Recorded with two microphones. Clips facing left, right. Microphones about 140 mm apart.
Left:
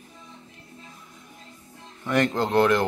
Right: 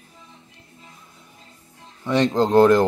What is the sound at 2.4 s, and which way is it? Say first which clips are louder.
Speech: right 8 dB; 40° right (ahead or behind).